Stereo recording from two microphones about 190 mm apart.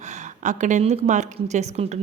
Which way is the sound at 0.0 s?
40° right (ahead or behind).